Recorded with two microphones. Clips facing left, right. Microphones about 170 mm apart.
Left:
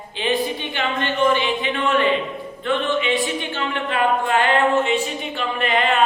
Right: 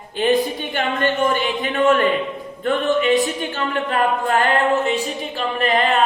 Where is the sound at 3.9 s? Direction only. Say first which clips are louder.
Even; 40° right (ahead or behind).